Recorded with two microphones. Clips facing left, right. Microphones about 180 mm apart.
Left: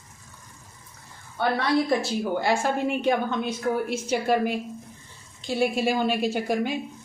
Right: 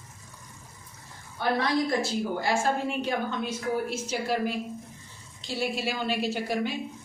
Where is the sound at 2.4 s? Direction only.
60° left (ahead or behind).